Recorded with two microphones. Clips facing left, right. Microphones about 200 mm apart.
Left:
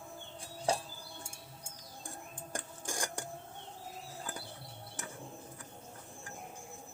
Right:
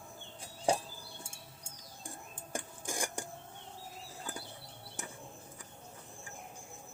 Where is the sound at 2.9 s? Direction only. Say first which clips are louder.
Right 1 dB; 10° right (ahead or behind).